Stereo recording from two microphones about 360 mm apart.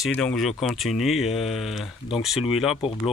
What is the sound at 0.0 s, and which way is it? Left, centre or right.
Speech, centre.